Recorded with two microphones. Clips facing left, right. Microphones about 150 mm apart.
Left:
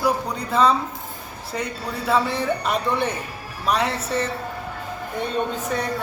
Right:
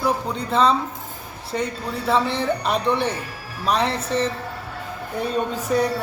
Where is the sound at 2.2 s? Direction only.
30° right (ahead or behind).